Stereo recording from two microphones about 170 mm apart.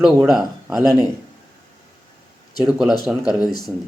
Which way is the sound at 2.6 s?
5° right (ahead or behind).